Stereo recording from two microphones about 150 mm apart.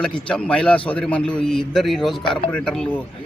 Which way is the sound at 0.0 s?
5° left (ahead or behind).